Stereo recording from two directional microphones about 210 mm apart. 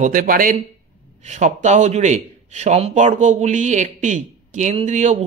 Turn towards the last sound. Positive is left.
turn(degrees=-35)  # may be behind; listen again after turning